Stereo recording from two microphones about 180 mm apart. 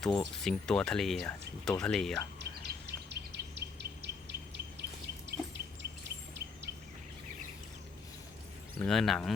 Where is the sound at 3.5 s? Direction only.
70° right (ahead or behind).